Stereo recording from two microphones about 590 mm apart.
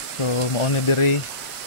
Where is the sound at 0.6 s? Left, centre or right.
Left.